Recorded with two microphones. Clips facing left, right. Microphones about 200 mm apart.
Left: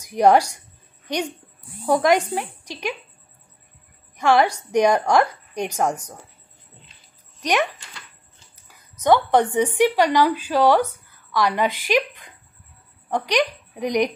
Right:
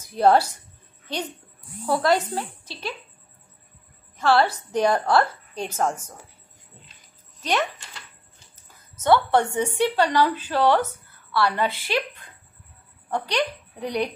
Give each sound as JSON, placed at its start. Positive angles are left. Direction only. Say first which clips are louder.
{"t": 0.0, "sound": "a woman's voice", "louder": "left 2 dB", "side_deg": 15}
{"t": 4.2, "sound": "a woman's voice", "louder": "left 2 dB", "side_deg": 15}
{"t": 8.5, "sound": "a sound", "louder": "left 1 dB", "side_deg": 15}
{"t": 9.8, "sound": "a woman's voice", "louder": "left 2 dB", "side_deg": 15}